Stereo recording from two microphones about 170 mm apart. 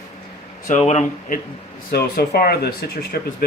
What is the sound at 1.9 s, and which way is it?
Speech, 65° left (ahead or behind).